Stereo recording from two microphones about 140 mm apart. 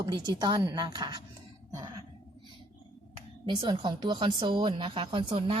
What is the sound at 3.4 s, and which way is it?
A woman's voice, 35° right (ahead or behind).